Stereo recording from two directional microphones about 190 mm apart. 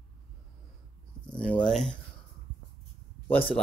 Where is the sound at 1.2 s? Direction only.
5° left (ahead or behind).